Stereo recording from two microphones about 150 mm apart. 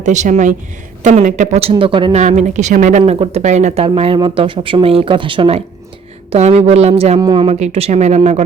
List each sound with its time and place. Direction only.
0.0 s speech: 55° right (ahead or behind)
1.7 s speech: 35° right (ahead or behind)
2.1 s speech: 50° right (ahead or behind)
3.1 s speech: 45° right (ahead or behind)
3.8 s speech: 40° right (ahead or behind)
7.2 s speech: 30° right (ahead or behind)
7.4 s speech: 45° right (ahead or behind)